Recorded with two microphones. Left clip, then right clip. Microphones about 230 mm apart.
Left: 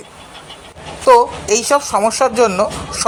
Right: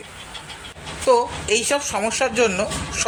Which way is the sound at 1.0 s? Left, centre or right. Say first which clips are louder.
Left 8 dB; centre.